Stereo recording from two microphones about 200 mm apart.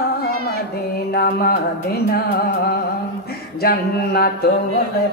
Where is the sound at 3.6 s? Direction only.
50° left (ahead or behind).